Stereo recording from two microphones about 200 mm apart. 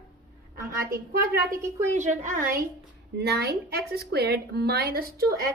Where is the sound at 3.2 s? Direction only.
55° right (ahead or behind).